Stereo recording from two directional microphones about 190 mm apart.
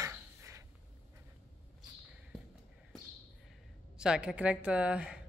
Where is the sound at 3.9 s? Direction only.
5° right (ahead or behind).